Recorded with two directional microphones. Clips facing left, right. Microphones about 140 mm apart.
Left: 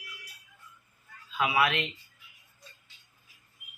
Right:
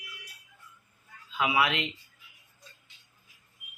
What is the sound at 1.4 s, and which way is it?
Speech, 15° right (ahead or behind).